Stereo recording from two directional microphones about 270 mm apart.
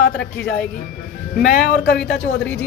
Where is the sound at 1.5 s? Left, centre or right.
Left.